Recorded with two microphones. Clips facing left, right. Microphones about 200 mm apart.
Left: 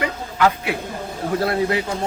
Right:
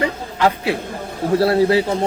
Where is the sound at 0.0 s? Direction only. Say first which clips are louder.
Right 1 dB; 30° right (ahead or behind).